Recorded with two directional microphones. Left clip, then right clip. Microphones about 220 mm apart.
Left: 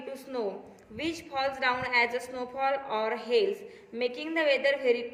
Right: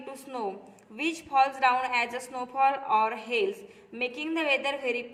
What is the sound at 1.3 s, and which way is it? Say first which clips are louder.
A woman's voice: right 6 dB; 35° right (ahead or behind).